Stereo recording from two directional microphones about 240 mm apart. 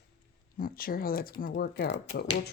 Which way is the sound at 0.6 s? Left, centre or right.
Left.